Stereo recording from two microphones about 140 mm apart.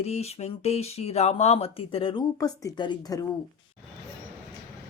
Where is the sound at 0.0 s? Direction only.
50° left (ahead or behind); by 3.2 s 30° left (ahead or behind).